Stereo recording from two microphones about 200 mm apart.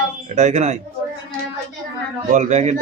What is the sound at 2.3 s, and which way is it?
Speech, 35° right (ahead or behind).